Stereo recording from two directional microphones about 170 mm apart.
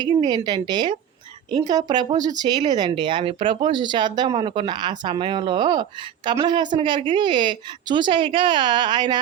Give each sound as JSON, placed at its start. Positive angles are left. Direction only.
{"t": 0.0, "sound": "speech", "side_deg": -25}